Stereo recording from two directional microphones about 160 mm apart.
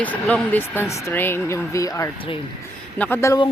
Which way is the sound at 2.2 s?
35° left (ahead or behind).